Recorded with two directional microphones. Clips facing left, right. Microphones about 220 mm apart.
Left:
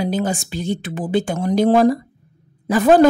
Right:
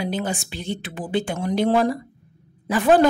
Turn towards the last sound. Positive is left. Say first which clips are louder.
# left 4 dB
turn(degrees=40)  # may be behind; listen again after turning